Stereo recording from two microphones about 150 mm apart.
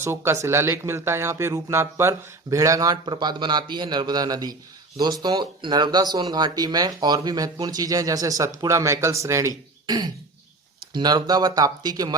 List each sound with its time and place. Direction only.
0.0 s speech: 15° right (ahead or behind)